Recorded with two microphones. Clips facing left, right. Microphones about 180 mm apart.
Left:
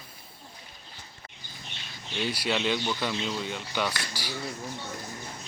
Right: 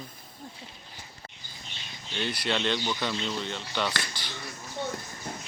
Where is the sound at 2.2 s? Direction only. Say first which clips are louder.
Left 1 dB; 10° left (ahead or behind).